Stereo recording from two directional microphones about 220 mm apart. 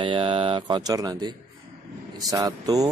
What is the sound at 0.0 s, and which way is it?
Speech, 25° right (ahead or behind).